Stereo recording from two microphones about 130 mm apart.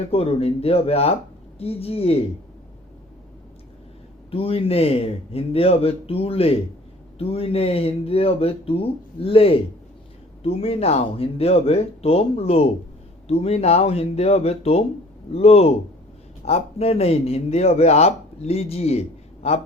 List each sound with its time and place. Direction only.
0.0 s speech: 50° left (ahead or behind)
4.3 s speech: 45° left (ahead or behind)